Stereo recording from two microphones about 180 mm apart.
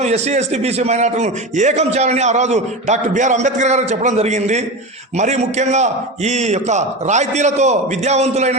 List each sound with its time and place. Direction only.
0.0 s a man's voice: 35° right (ahead or behind)